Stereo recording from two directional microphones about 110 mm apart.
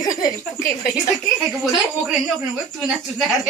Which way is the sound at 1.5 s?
5° right (ahead or behind).